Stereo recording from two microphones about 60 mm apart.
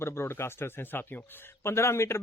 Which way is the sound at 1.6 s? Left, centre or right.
Left.